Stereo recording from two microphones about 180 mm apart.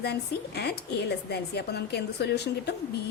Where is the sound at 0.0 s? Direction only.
65° left (ahead or behind).